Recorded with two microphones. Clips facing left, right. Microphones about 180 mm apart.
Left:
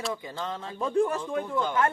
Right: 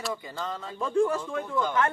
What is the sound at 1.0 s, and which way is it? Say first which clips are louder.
Speech: right 1 dB; 30° left (ahead or behind).